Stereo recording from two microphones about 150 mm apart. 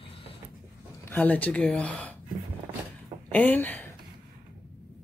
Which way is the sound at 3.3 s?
10° left (ahead or behind).